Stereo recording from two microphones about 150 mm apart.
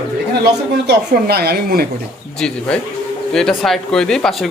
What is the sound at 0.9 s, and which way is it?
Speech, 90° right.